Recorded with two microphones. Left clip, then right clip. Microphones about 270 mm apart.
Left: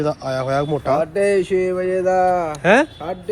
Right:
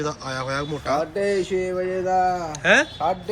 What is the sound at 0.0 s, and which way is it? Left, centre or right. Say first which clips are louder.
Speech: left 6 dB; centre.